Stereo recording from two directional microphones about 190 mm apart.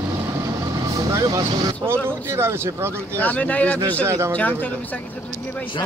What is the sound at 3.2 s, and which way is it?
Speech, 10° left (ahead or behind).